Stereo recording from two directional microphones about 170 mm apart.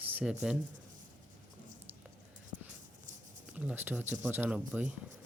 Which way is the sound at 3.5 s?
10° right (ahead or behind).